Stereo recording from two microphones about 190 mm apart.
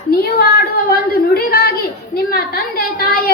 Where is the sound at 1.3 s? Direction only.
55° left (ahead or behind).